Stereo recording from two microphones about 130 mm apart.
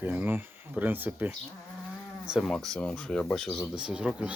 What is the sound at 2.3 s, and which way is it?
Speech, centre (ahead or behind).